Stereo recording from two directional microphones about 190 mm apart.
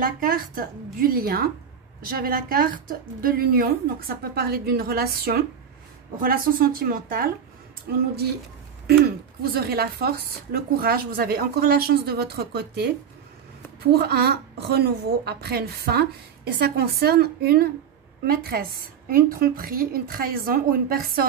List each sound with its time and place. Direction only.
0.0 s a woman's voice: 45° right (ahead or behind)
7.9 s speech: 60° right (ahead or behind)
9.4 s speech: 55° right (ahead or behind)
13.9 s a woman's voice: 55° right (ahead or behind)